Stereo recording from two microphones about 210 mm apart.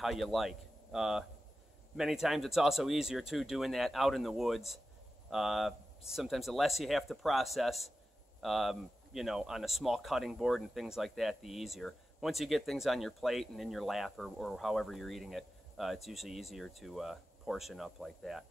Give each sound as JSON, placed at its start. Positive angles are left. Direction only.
{"t": 0.0, "sound": "speech", "side_deg": 0}